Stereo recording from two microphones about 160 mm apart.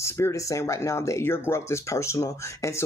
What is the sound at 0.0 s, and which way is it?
Speech, 20° left (ahead or behind).